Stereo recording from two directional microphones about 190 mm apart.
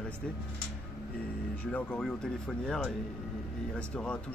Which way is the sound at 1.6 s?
5° left (ahead or behind).